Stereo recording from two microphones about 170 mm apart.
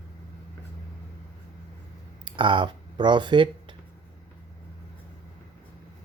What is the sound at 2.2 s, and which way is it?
Speech, 30° right (ahead or behind).